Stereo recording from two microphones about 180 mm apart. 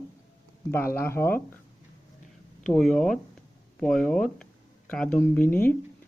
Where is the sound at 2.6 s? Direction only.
Centre (ahead or behind).